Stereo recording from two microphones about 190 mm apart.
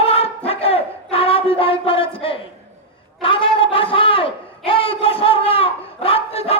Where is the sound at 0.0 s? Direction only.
30° left (ahead or behind).